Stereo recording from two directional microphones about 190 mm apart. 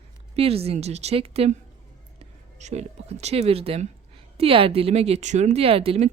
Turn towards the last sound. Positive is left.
turn(degrees=-30)  # may be behind; listen again after turning